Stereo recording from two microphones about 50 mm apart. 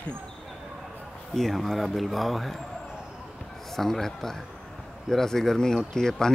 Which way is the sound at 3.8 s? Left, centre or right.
Centre.